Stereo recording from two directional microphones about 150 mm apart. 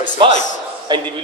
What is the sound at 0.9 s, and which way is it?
Speech, 30° right (ahead or behind).